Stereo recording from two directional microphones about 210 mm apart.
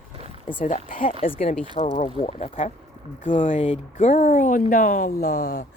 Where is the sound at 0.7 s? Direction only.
40° left (ahead or behind).